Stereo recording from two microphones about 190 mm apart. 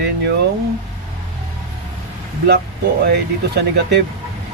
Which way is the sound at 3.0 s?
60° right (ahead or behind).